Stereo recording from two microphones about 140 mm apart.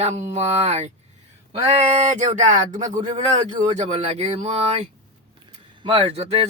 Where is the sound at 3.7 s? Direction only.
50° right (ahead or behind).